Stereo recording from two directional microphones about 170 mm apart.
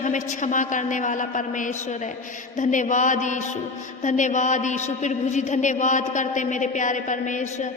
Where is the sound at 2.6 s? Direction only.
45° left (ahead or behind).